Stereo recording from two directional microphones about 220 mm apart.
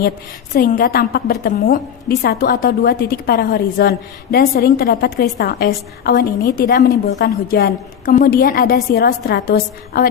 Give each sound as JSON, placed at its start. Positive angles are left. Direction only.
{"t": 0.5, "sound": "a woman's voice", "side_deg": 40}